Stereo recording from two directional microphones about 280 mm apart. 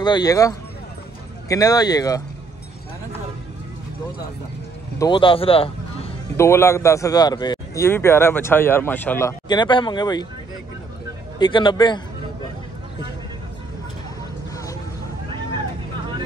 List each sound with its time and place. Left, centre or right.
0.0 s a man's voice: centre
4.9 s a man's voice: centre
11.3 s a man's voice: centre
14.5 s vehicle: centre